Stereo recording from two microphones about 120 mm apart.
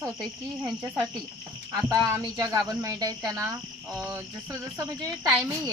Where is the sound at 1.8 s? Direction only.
30° right (ahead or behind).